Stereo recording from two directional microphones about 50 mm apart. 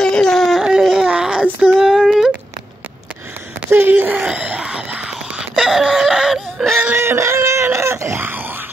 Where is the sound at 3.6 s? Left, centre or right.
Right.